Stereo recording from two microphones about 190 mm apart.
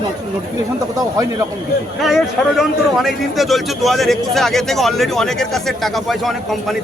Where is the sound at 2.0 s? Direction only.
Centre (ahead or behind).